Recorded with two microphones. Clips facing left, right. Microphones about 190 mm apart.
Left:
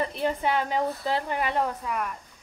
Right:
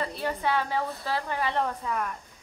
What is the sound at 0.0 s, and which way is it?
Speech, 20° left (ahead or behind).